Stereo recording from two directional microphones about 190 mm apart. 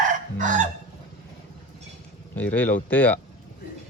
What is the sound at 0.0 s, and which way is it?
Chicken, 40° right (ahead or behind).